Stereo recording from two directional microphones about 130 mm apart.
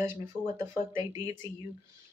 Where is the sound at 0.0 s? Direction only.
20° right (ahead or behind).